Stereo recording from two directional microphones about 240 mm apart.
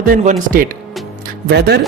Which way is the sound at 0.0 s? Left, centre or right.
Right.